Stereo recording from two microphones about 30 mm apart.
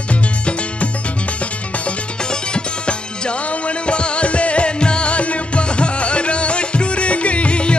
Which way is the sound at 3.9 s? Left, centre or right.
Left.